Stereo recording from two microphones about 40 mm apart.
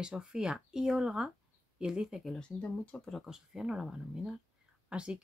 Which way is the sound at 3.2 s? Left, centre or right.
Centre.